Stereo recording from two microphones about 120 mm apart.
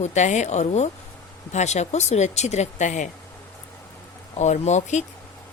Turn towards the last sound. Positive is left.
turn(degrees=75)  # may be behind; listen again after turning